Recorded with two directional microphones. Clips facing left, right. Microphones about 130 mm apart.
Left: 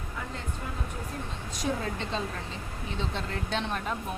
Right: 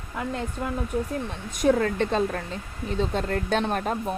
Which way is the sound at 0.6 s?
65° right (ahead or behind).